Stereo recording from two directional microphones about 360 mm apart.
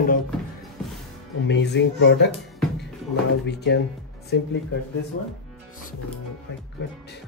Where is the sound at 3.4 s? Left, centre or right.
Left.